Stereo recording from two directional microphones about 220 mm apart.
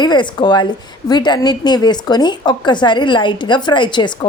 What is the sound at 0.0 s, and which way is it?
A woman's voice, 20° left (ahead or behind).